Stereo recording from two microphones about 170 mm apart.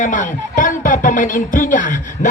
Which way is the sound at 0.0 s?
50° left (ahead or behind).